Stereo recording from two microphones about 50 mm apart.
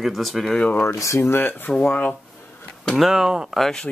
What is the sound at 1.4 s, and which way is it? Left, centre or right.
Speech, left.